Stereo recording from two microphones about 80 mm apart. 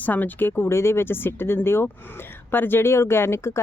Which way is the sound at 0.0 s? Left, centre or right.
Left.